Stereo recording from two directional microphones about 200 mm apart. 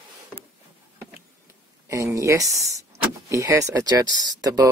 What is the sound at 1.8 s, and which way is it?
Speech, 15° right (ahead or behind).